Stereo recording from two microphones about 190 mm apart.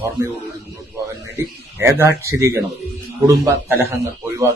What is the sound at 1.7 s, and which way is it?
Speech, 15° right (ahead or behind).